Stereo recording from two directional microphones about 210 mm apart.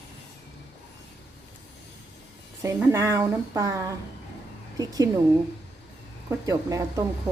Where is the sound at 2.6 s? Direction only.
15° right (ahead or behind).